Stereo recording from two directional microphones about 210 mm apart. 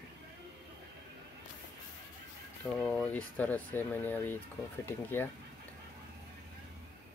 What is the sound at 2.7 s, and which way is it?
Speech, 5° left (ahead or behind).